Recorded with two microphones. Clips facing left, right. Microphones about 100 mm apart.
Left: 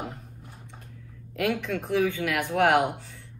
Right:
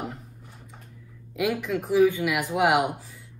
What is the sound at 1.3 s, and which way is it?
A woman's voice, 5° right (ahead or behind).